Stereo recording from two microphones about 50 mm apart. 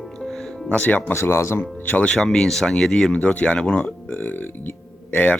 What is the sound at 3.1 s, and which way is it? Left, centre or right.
Speech, left.